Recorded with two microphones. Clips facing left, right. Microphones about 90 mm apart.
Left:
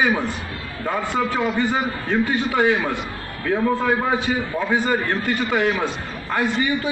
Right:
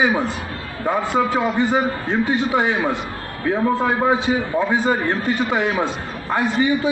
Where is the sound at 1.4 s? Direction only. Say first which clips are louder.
Right 3 dB; 5° right (ahead or behind).